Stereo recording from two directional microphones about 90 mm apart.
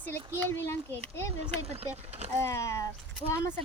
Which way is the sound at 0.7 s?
25° left (ahead or behind).